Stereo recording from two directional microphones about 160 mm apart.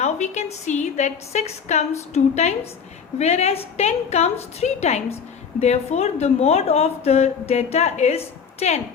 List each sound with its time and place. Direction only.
0.0 s a woman's voice: 45° left (ahead or behind)